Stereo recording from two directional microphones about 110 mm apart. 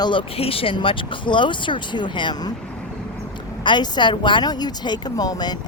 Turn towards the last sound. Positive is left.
turn(degrees=40)  # may be behind; listen again after turning